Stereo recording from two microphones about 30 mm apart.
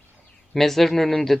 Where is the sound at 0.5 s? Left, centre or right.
Centre.